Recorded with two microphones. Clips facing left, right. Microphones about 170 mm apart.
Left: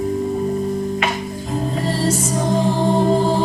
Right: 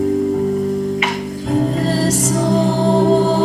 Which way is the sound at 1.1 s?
90° right.